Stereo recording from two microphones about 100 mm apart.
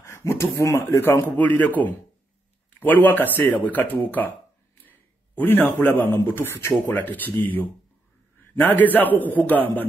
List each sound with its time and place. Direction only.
0.0 s a man's voice: 25° left (ahead or behind)
8.5 s a man's voice: 15° left (ahead or behind)